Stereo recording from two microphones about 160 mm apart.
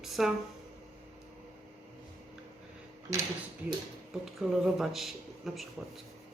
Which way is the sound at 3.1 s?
20° right (ahead or behind).